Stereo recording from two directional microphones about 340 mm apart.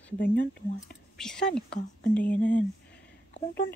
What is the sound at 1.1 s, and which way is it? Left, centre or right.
Speech, centre.